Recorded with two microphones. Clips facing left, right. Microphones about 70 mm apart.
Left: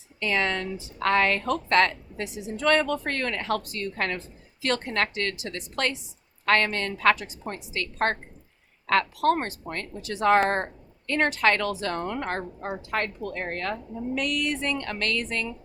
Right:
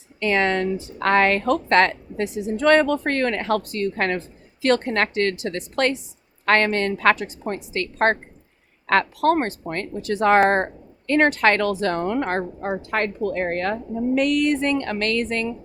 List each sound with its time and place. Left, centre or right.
0.2 s speech: right